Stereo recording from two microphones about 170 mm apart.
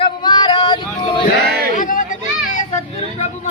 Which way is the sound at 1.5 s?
65° right (ahead or behind).